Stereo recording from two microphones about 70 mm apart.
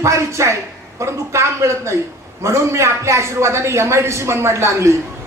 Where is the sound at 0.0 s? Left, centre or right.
Right.